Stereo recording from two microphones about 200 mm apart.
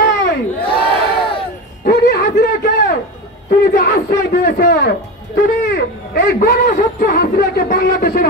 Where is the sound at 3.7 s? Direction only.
50° left (ahead or behind).